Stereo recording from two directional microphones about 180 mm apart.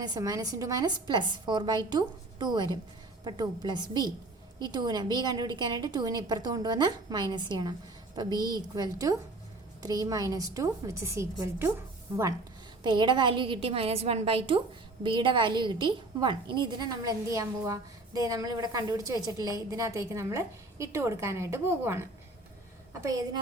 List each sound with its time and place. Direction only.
0.0 s a woman's voice: 20° right (ahead or behind)
12.8 s a woman's voice: 25° right (ahead or behind)